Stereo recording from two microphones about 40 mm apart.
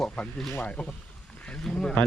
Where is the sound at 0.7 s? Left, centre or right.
Left.